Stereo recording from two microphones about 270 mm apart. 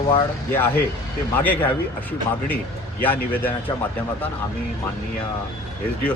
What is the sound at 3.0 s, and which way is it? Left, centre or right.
Speech, centre.